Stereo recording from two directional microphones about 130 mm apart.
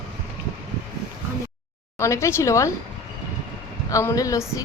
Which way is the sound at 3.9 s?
25° left (ahead or behind).